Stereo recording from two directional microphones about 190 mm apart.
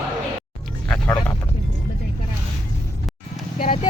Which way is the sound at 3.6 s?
45° left (ahead or behind).